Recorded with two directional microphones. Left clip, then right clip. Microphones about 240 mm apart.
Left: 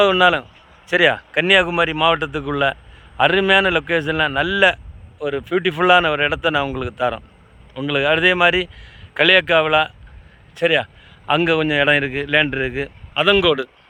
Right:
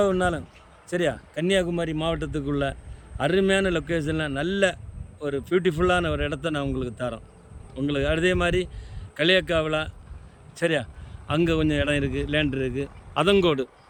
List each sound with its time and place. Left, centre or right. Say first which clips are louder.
0.1 s a man's voice: left 10 dB; left
1.5 s speech: left 9 dB; centre